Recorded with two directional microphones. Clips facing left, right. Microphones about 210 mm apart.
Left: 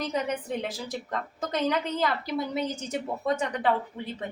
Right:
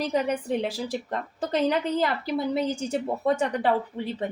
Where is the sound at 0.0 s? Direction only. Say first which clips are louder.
Right 4 dB; 30° right (ahead or behind).